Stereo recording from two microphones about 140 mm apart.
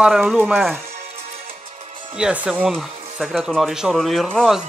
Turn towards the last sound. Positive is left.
turn(degrees=0)  # may be behind; listen again after turning